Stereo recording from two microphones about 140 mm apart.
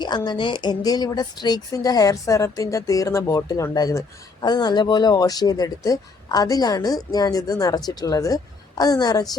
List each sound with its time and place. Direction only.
0.0 s speech: 30° left (ahead or behind)